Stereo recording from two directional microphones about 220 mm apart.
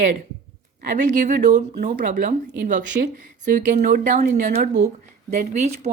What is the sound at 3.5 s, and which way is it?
A woman's voice, 35° right (ahead or behind).